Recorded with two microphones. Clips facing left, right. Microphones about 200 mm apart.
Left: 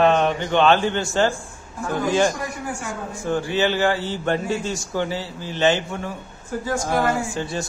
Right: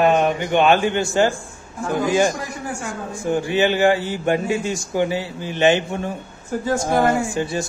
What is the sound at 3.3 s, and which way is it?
A man's voice, 15° right (ahead or behind).